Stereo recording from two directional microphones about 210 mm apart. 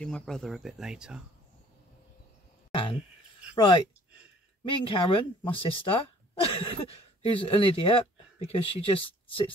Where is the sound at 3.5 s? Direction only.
20° left (ahead or behind).